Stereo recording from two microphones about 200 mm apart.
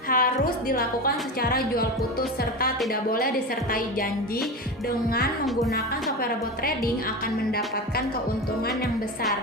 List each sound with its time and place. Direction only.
0.1 s a woman's voice: 45° left (ahead or behind)